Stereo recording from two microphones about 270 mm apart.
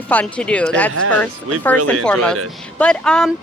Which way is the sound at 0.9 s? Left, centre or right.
Right.